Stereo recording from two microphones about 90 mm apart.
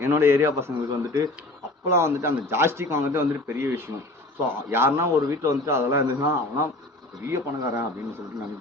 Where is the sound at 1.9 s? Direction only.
30° right (ahead or behind).